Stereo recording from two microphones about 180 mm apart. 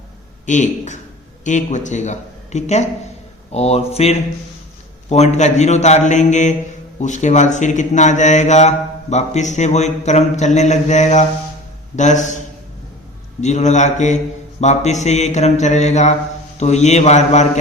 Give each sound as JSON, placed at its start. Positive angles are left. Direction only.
{"t": 0.4, "sound": "a man's voice", "side_deg": 45}
{"t": 13.4, "sound": "a man's voice", "side_deg": 40}